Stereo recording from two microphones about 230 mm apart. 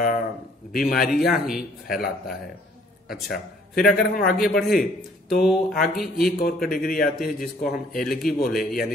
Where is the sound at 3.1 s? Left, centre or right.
Centre.